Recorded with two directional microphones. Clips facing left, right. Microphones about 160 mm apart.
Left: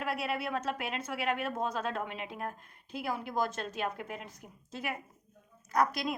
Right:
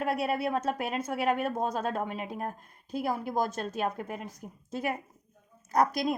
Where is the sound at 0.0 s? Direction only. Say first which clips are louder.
Right 5 dB; 45° right (ahead or behind).